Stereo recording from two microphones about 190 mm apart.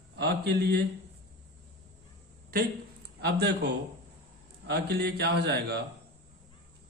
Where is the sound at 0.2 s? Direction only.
60° right (ahead or behind).